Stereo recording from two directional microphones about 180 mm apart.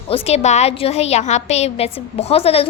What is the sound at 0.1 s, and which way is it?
A woman's voice, 35° left (ahead or behind).